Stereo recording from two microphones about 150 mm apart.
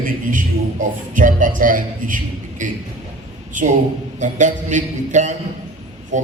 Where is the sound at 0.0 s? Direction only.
60° right (ahead or behind).